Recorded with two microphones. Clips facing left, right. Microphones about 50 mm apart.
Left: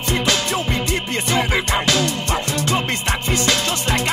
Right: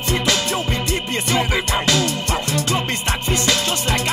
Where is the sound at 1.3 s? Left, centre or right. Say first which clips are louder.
Left 1 dB; left.